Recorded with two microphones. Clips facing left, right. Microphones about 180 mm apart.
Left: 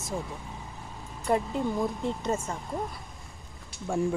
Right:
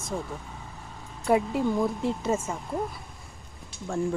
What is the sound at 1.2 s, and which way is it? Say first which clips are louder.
Speech: right 3 dB; 5° right (ahead or behind).